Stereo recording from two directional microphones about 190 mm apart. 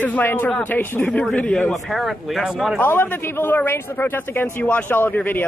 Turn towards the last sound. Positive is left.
turn(degrees=10)  # may be behind; listen again after turning